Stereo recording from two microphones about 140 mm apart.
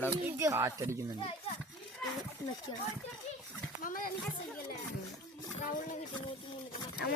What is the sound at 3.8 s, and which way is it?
Speech, 75° left (ahead or behind).